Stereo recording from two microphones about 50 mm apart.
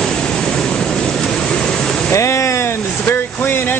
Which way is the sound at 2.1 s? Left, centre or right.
Left.